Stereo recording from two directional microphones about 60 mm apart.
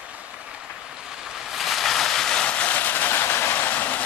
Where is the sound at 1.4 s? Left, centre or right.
Centre; by 4.0 s left.